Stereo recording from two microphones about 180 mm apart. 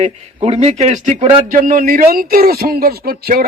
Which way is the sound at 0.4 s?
35° right (ahead or behind).